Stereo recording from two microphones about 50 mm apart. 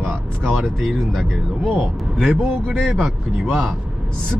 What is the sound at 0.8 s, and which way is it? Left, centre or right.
Speech, centre.